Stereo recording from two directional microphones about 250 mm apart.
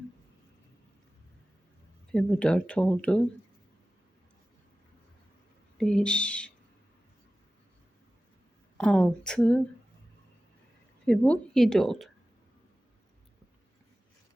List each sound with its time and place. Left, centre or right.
2.1 s speech: centre
5.7 s speech: centre
8.8 s speech: centre
11.0 s speech: centre